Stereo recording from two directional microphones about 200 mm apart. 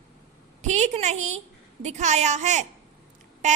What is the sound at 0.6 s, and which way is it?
A woman's voice, 35° right (ahead or behind).